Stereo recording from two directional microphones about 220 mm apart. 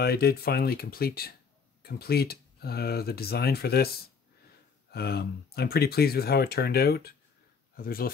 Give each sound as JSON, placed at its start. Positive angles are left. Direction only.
{"t": 0.0, "sound": "speech", "side_deg": 45}